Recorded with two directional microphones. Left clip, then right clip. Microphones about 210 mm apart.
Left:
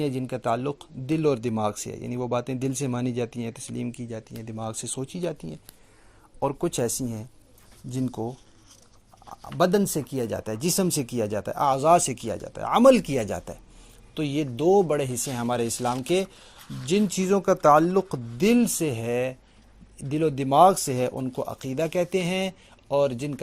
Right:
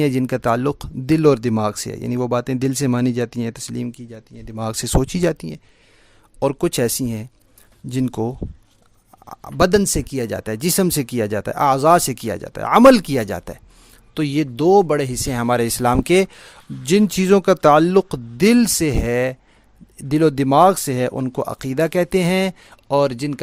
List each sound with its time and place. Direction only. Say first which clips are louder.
0.0 s speech: right 9 dB; 40° right (ahead or behind)